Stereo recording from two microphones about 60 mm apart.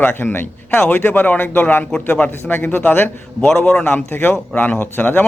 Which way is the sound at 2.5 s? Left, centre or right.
Left.